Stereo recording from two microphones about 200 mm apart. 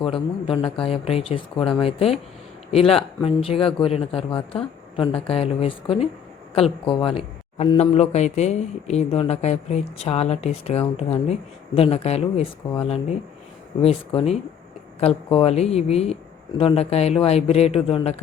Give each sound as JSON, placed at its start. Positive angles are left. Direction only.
{"t": 0.0, "sound": "speech", "side_deg": 25}